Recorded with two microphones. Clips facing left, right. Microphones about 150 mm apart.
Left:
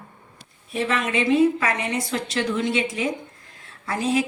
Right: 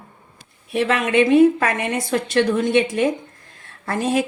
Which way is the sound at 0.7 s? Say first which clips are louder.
Right 5 dB; 60° right (ahead or behind).